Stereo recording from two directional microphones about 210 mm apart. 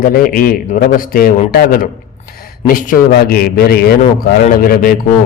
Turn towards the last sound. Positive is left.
turn(degrees=45)  # may be behind; listen again after turning